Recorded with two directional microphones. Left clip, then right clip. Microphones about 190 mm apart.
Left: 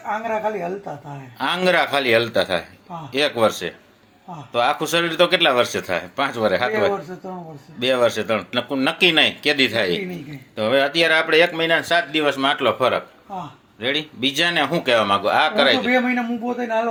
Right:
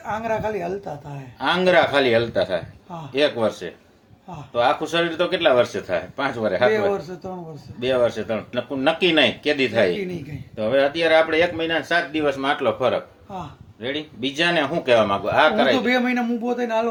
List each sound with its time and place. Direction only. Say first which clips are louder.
1.4 s speech: right 1 dB; 20° left (ahead or behind)
15.9 s a man's voice: left 1 dB; 35° right (ahead or behind)